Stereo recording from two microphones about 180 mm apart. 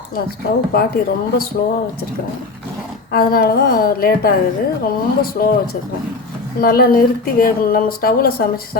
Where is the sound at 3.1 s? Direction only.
55° left (ahead or behind).